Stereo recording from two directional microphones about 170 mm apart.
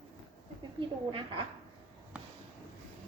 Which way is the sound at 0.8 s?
30° right (ahead or behind).